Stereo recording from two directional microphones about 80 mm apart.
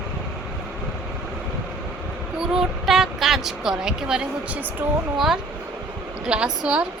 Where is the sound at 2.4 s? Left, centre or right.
Centre.